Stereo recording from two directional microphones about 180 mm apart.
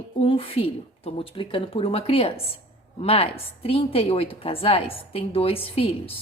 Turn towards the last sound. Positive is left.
turn(degrees=30)  # may be behind; listen again after turning